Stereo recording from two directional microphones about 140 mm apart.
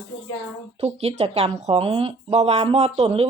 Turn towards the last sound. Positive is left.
turn(degrees=-45)  # may be behind; listen again after turning